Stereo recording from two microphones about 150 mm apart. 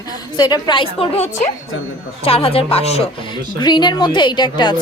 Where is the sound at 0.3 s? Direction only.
25° left (ahead or behind).